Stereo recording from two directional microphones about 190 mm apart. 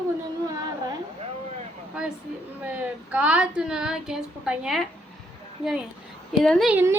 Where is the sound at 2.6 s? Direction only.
10° right (ahead or behind).